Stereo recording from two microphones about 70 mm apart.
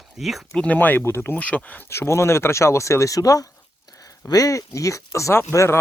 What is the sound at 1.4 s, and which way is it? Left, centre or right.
Speech, left.